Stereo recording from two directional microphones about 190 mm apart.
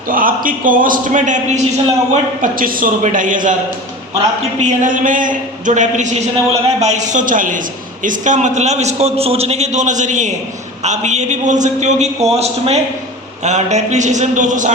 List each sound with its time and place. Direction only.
0.1 s a man's voice: 45° right (ahead or behind)
4.8 s a man's voice: 45° right (ahead or behind)